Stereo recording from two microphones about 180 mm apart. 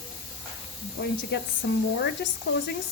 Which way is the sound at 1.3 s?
65° left (ahead or behind).